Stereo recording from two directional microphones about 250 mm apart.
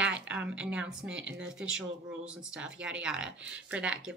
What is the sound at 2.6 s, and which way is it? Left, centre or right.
Speech, centre.